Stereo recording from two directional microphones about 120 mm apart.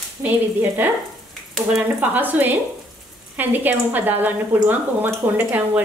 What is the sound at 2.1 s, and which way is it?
Speech, 15° right (ahead or behind).